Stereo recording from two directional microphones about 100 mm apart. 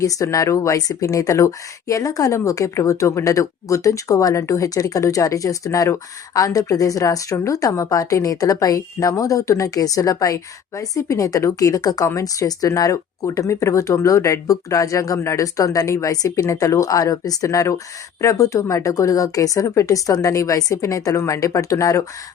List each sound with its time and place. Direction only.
0.0 s speech: 35° left (ahead or behind)